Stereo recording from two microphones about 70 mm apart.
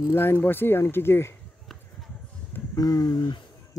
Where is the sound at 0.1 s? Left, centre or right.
Left.